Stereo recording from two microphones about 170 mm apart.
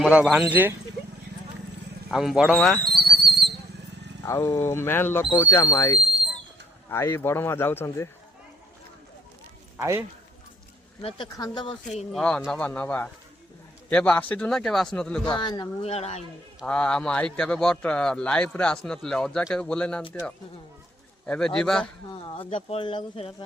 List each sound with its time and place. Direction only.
0.0 s speech: 5° right (ahead or behind)
2.0 s a man's voice: centre (ahead or behind)
2.8 s whistle: 70° right (ahead or behind)
4.3 s speech: 15° left (ahead or behind)
9.7 s speech: 15° right (ahead or behind)
11.0 s speech: 25° left (ahead or behind)
12.1 s a man's voice: 5° left (ahead or behind)
15.3 s speech: 25° left (ahead or behind)
15.8 s speech: 40° left (ahead or behind)
16.6 s a man's voice: 5° left (ahead or behind)
21.2 s a man's voice: 5° left (ahead or behind)
22.3 s speech: 30° left (ahead or behind)